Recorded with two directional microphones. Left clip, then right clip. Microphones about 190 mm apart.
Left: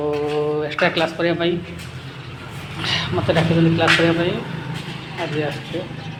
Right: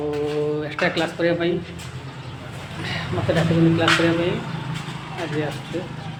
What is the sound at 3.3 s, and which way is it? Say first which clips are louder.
Speech: left 3 dB; centre (ahead or behind).